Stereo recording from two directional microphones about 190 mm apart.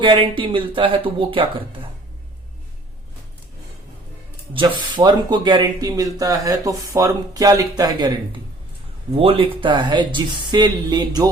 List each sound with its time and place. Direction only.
0.0 s speech: 25° right (ahead or behind)
4.5 s speech: 20° right (ahead or behind)
9.1 s speech: 30° right (ahead or behind)